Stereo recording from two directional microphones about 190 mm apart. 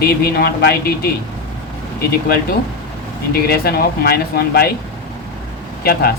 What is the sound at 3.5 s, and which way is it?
Speech, 55° left (ahead or behind).